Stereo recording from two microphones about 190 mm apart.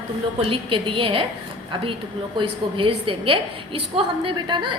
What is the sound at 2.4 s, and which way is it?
A woman's voice, 25° right (ahead or behind).